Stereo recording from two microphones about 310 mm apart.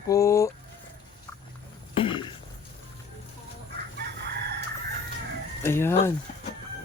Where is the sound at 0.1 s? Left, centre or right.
Centre.